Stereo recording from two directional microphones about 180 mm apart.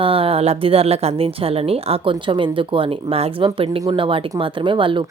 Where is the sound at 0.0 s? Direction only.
30° right (ahead or behind).